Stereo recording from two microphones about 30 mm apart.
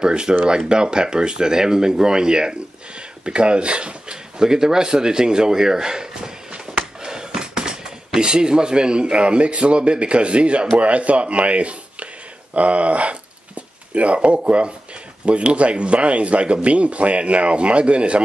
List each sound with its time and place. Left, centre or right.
0.0 s speech: right
4.4 s a man's voice: right